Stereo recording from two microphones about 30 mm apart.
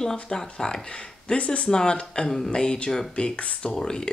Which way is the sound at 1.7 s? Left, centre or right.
Left.